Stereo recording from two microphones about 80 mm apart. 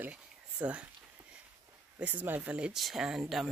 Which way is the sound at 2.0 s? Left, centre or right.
Right.